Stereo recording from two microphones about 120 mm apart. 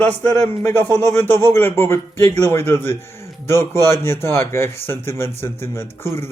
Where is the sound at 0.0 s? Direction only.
20° left (ahead or behind).